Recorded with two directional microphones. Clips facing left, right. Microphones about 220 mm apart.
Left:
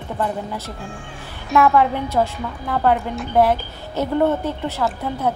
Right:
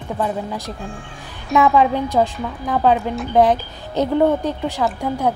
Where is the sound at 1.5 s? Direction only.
15° right (ahead or behind).